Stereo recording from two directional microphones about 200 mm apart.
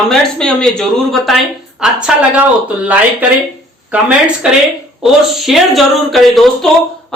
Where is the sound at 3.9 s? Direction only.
5° right (ahead or behind).